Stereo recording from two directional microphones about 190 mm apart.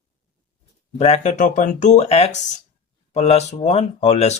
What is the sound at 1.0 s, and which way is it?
Speech, 35° left (ahead or behind).